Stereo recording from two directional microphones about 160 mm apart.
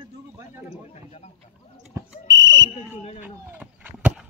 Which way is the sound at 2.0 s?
25° right (ahead or behind).